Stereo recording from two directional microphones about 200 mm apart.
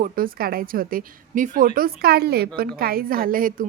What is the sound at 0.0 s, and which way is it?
Speech, 45° right (ahead or behind).